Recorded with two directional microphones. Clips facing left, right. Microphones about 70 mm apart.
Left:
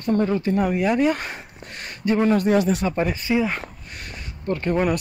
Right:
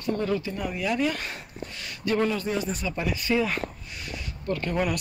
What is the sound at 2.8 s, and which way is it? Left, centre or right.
Speech, left.